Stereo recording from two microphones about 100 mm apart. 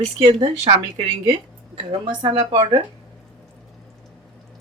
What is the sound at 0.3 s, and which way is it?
Speech, 60° right (ahead or behind).